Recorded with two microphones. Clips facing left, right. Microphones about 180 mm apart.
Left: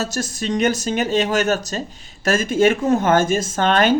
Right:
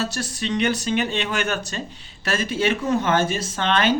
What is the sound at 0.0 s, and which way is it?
Speech, 45° left (ahead or behind).